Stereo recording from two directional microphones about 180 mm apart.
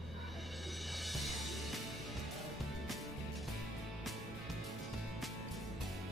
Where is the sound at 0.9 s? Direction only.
Centre (ahead or behind).